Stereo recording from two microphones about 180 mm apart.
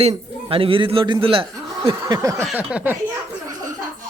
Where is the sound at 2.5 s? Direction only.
5° right (ahead or behind).